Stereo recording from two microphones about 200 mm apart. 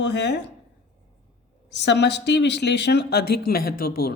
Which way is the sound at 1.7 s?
60° left (ahead or behind).